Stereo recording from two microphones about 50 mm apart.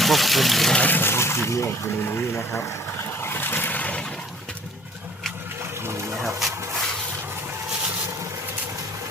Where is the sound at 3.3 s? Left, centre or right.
Left.